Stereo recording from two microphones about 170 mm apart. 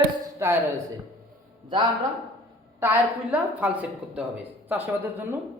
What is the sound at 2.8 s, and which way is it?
A woman's voice, 10° right (ahead or behind).